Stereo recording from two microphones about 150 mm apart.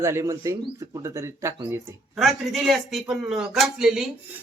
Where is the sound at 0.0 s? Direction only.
20° right (ahead or behind).